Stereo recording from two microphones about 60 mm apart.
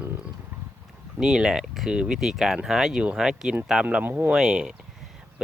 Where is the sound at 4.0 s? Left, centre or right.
Right.